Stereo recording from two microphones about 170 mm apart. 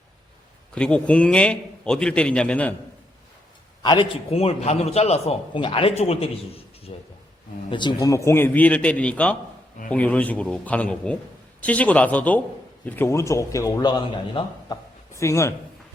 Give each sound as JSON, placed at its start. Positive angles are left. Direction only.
{"t": 0.7, "sound": "a man's voice", "side_deg": 5}
{"t": 3.8, "sound": "a man's voice", "side_deg": 30}
{"t": 15.1, "sound": "a man's voice", "side_deg": 15}